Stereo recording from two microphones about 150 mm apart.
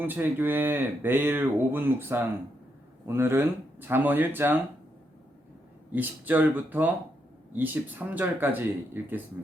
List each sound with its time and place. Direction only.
0.0 s speech: 15° right (ahead or behind)
5.9 s speech: 10° right (ahead or behind)